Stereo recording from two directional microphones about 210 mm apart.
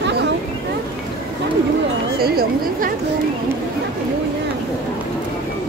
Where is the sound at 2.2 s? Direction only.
45° right (ahead or behind).